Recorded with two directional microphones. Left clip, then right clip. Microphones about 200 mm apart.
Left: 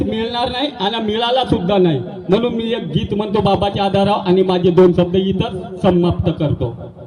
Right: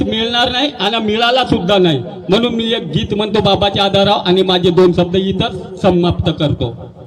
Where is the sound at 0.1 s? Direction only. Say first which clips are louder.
Right 5 dB; 15° right (ahead or behind).